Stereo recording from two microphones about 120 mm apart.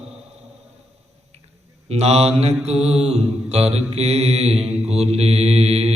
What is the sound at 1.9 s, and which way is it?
Mantra, 60° right (ahead or behind).